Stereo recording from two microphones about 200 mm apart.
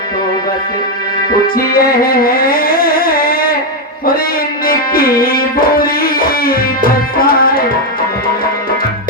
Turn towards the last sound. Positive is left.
turn(degrees=45)  # may be behind; listen again after turning